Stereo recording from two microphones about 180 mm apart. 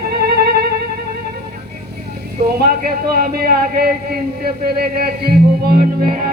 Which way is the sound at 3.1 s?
55° right (ahead or behind).